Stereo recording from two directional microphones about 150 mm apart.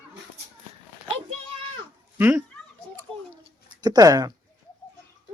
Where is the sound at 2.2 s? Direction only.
10° right (ahead or behind).